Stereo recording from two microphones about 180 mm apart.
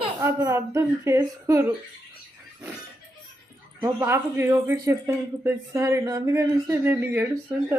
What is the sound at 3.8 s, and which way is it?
Speech, 15° right (ahead or behind).